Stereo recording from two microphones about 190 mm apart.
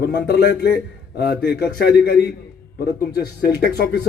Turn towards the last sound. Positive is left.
turn(degrees=60)  # may be behind; listen again after turning